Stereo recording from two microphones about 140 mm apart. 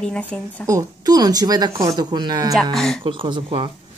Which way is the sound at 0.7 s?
25° right (ahead or behind).